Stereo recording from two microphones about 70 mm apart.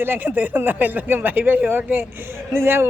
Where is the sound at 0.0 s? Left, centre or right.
Right.